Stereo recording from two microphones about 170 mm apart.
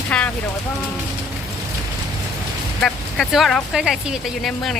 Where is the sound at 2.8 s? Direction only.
Centre (ahead or behind).